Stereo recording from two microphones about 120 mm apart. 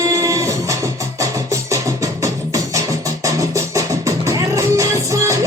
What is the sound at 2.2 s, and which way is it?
Music, 25° right (ahead or behind).